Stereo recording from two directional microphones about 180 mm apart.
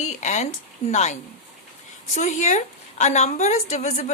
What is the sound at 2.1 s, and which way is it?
A woman's voice, 40° left (ahead or behind).